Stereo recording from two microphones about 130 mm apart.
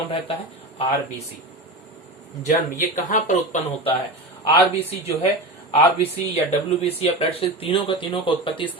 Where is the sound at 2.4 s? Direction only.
80° left.